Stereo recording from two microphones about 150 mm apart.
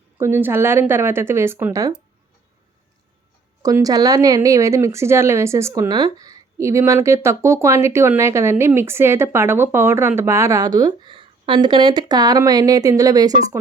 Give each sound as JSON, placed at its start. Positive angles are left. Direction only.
{"t": 0.2, "sound": "a woman's voice", "side_deg": -15}
{"t": 3.6, "sound": "a woman's voice", "side_deg": -25}